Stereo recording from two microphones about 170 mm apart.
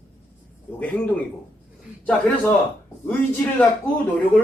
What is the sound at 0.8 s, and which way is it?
Speech, 10° left (ahead or behind).